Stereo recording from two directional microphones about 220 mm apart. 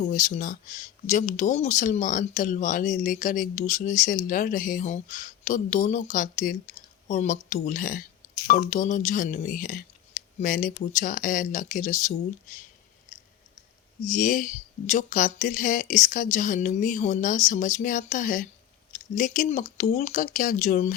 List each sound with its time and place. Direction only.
0.0 s speech: 35° left (ahead or behind)
14.1 s speech: 35° left (ahead or behind)